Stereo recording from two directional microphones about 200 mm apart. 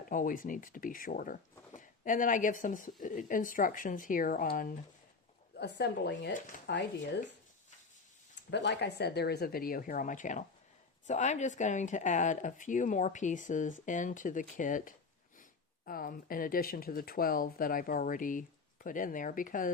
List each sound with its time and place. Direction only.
0.1 s speech: 40° left (ahead or behind)
5.5 s speech: 55° left (ahead or behind)
8.4 s speech: 60° left (ahead or behind); by 19.7 s 40° left (ahead or behind)